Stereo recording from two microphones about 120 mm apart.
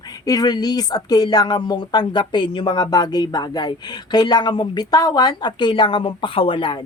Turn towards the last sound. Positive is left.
turn(degrees=45)  # may be behind; listen again after turning